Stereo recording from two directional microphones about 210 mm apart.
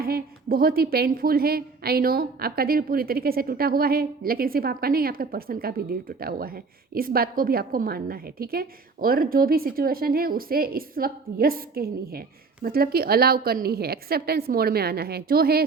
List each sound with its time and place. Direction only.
0.0 s a woman's voice: 45° right (ahead or behind)